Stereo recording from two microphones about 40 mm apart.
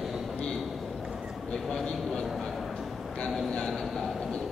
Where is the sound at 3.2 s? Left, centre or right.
Left.